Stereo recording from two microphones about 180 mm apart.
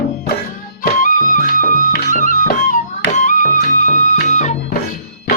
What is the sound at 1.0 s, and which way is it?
Music, 50° left (ahead or behind).